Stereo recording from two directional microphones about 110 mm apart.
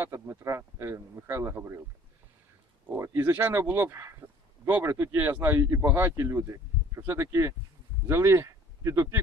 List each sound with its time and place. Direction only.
0.0 s speech: 25° right (ahead or behind)
3.0 s speech: 20° right (ahead or behind)